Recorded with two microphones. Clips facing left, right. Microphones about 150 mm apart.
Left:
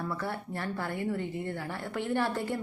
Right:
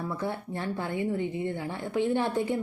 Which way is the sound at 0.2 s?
20° right (ahead or behind).